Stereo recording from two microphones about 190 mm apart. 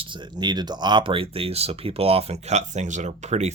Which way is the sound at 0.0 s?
25° right (ahead or behind).